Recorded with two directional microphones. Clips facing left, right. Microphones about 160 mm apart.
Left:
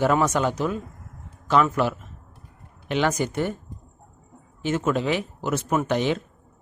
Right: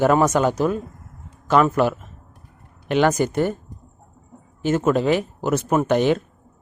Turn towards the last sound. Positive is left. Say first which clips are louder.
# right 5 dB
turn(degrees=-50)  # may be behind; listen again after turning